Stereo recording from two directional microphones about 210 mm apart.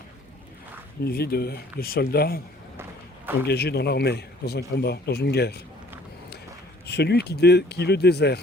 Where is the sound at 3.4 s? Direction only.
50° left (ahead or behind).